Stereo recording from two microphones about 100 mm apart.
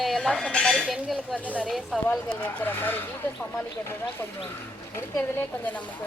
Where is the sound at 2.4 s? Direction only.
20° left (ahead or behind).